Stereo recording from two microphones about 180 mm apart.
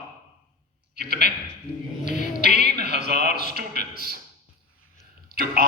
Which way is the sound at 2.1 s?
65° right (ahead or behind).